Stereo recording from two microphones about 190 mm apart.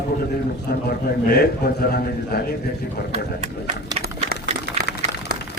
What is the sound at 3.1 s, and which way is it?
Speech, 30° right (ahead or behind).